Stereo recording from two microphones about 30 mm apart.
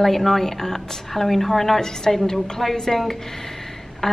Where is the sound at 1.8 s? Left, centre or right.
Left.